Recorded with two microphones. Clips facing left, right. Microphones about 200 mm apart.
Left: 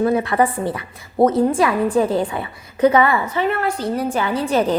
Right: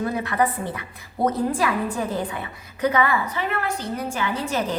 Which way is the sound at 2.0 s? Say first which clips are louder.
Left 9 dB; 30° left (ahead or behind).